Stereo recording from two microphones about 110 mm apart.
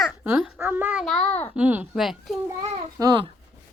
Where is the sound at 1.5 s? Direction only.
10° right (ahead or behind).